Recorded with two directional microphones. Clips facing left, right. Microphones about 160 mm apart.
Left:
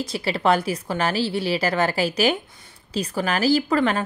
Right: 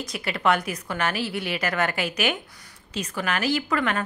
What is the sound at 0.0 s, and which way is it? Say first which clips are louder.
A woman's voice: left 3 dB; 30° left (ahead or behind).